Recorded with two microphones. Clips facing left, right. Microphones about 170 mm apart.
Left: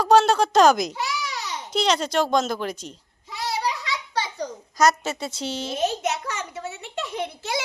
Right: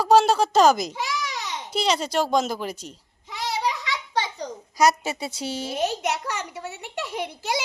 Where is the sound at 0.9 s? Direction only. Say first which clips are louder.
Even; 15° right (ahead or behind).